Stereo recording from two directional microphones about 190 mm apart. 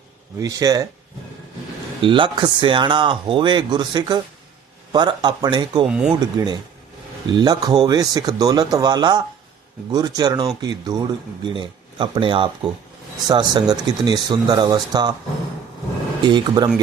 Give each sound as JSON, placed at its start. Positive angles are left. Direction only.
{"t": 0.3, "sound": "speech", "side_deg": -20}
{"t": 2.0, "sound": "speech", "side_deg": -25}
{"t": 5.9, "sound": "speech", "side_deg": -5}
{"t": 6.1, "sound": "speech", "side_deg": -20}
{"t": 16.2, "sound": "speech", "side_deg": -25}